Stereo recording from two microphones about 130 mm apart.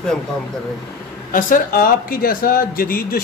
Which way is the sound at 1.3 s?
90° left.